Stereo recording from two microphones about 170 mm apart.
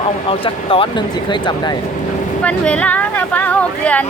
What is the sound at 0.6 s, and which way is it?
Speech, 35° left (ahead or behind).